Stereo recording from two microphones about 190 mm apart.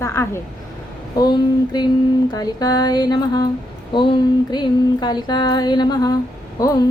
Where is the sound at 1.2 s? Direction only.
20° left (ahead or behind).